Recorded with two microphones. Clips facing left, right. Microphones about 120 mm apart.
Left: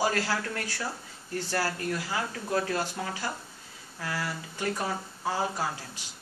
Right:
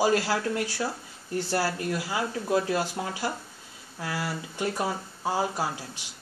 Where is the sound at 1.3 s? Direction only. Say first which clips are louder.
Right 3 dB; 25° right (ahead or behind).